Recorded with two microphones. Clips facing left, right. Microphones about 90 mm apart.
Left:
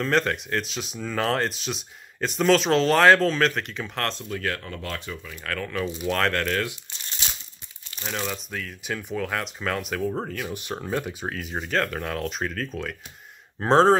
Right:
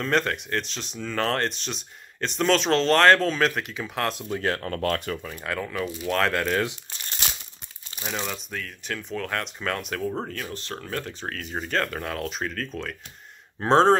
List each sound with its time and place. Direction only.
0.0 s speech: centre (ahead or behind)
4.3 s speech: 30° right (ahead or behind)
4.6 s speech: 55° right (ahead or behind)
5.4 s speech: 15° right (ahead or behind)
6.1 s speech: 5° right (ahead or behind)
7.2 s crumpling: 55° right (ahead or behind)
8.0 s speech: 5° right (ahead or behind)